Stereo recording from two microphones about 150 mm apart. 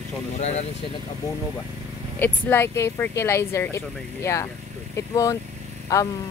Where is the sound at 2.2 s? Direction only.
15° left (ahead or behind).